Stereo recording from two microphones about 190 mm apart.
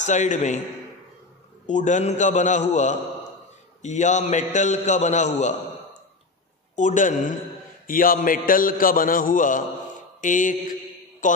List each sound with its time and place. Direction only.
0.0 s a man's voice: 40° left (ahead or behind)
1.7 s a man's voice: 40° left (ahead or behind)
6.7 s a man's voice: 40° left (ahead or behind)
10.2 s mantra: 40° left (ahead or behind)